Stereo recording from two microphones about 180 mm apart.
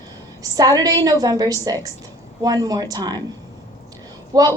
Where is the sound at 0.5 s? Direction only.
20° right (ahead or behind).